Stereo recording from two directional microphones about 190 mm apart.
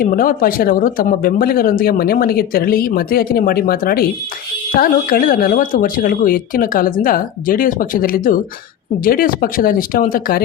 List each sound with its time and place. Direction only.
0.0 s speech: 50° left (ahead or behind)